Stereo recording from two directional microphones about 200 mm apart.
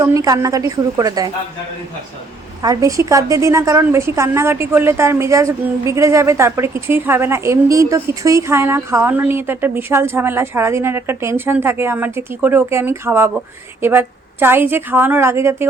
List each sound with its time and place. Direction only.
0.0 s a woman's voice: 15° right (ahead or behind)
2.6 s a woman's voice: 15° right (ahead or behind)